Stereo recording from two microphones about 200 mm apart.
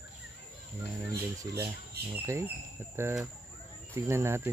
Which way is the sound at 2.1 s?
15° right (ahead or behind).